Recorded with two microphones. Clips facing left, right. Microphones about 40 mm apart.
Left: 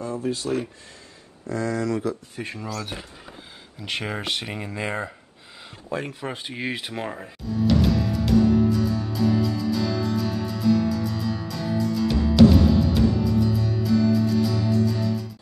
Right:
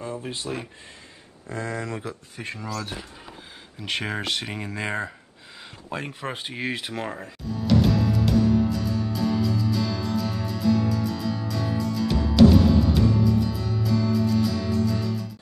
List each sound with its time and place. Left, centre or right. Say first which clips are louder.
0.2 s speech: left 6 dB; right
2.3 s speech: left 1 dB; centre
4.2 s speech: even; centre
5.9 s speech: left 3 dB; right
6.4 s music: right 1 dB; centre